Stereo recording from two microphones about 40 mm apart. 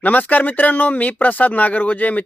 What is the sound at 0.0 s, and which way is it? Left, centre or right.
Speech, left.